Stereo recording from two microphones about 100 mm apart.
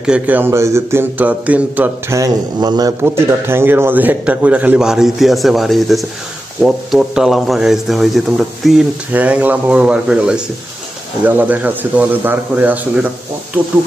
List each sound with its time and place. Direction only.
0.0 s speech: 10° right (ahead or behind)
0.4 s speech: 30° right (ahead or behind)
2.0 s speech: 35° right (ahead or behind)
3.0 s speech: 25° right (ahead or behind); by 8.8 s centre (ahead or behind)
9.1 s speech: 15° right (ahead or behind)